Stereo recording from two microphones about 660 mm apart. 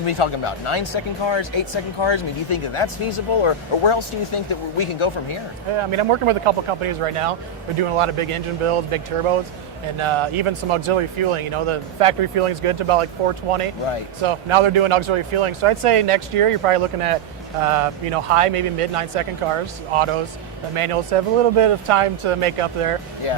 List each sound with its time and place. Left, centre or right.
0.0 s speech: left
5.7 s speech: right